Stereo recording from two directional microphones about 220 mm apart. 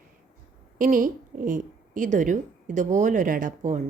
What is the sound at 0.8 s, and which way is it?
A woman's voice, 40° right (ahead or behind).